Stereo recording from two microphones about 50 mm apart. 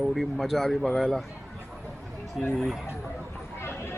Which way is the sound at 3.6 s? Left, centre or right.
Left.